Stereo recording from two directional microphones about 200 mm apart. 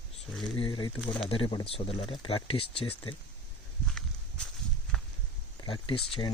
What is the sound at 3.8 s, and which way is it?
Walk, 5° left (ahead or behind).